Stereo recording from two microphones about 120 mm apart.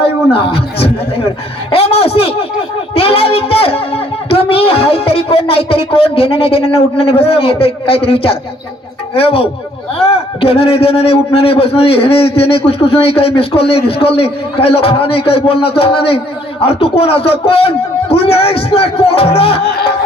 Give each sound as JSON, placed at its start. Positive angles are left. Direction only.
{"t": 0.0, "sound": "a man's voice", "side_deg": 55}